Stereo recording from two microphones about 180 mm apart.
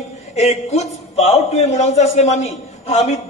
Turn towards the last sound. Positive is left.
turn(degrees=35)  # may be behind; listen again after turning